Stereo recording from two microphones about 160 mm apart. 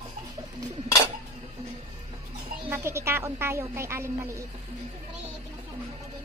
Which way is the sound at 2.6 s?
15° right (ahead or behind).